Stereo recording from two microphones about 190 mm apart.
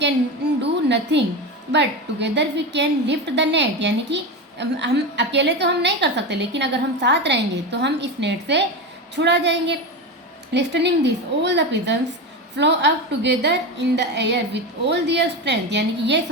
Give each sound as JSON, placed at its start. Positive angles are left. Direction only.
{"t": 0.6, "sound": "a woman's voice", "side_deg": -65}